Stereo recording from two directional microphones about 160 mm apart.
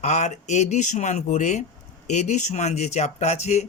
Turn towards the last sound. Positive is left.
turn(degrees=45)  # may be behind; listen again after turning